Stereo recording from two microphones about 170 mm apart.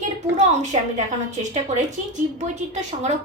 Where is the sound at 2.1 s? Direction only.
45° right (ahead or behind).